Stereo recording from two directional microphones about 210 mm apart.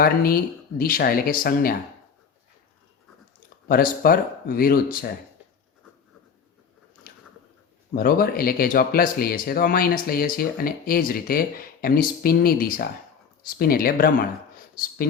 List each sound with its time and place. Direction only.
0.0 s speech: 45° left (ahead or behind)
3.7 s speech: 45° left (ahead or behind)
7.9 s speech: 45° left (ahead or behind)